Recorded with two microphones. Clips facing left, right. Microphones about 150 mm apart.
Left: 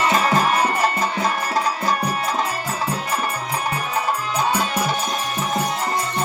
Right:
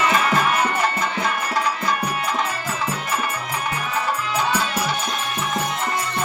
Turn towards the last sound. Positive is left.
turn(degrees=40)  # may be behind; listen again after turning